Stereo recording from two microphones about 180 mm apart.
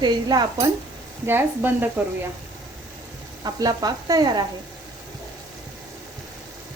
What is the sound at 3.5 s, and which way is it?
Speech, 20° right (ahead or behind).